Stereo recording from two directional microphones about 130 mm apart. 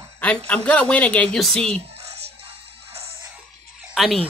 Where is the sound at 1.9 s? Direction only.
55° right (ahead or behind).